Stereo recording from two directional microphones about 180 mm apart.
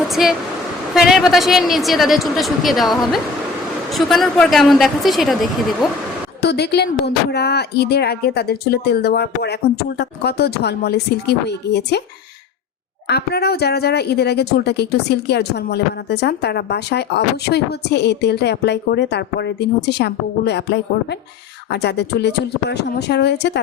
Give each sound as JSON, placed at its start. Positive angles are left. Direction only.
{"t": 0.1, "sound": "a woman's voice", "side_deg": 0}
{"t": 6.4, "sound": "speech", "side_deg": 65}
{"t": 13.1, "sound": "speech", "side_deg": 65}